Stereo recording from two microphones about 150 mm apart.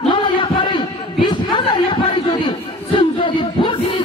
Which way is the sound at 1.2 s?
30° left (ahead or behind).